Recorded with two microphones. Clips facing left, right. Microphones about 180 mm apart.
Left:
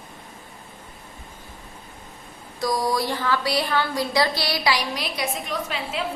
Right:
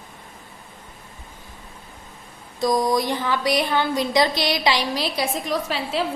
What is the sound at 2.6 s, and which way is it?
A woman's voice, 20° right (ahead or behind).